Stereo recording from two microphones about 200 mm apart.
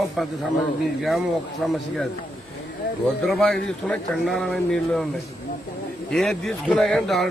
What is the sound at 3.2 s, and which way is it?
A man's voice, centre (ahead or behind).